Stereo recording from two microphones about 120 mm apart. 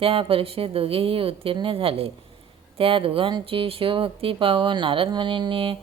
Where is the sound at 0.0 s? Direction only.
50° right (ahead or behind).